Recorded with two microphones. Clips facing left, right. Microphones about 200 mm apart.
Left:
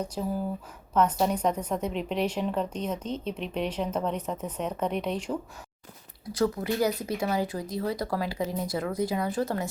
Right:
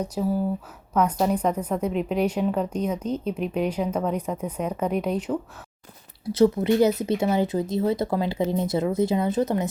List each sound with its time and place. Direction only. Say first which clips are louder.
0.0 s speech: right 5 dB; 5° right (ahead or behind)
6.2 s speech: right 8 dB; 25° right (ahead or behind)